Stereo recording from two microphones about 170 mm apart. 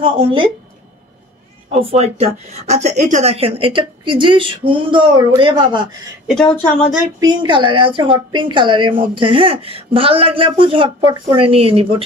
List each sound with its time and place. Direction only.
0.0 s speech: 30° right (ahead or behind)
1.8 s speech: 35° right (ahead or behind)
6.2 s a woman's voice: 5° left (ahead or behind)
7.2 s a woman's voice: 25° right (ahead or behind)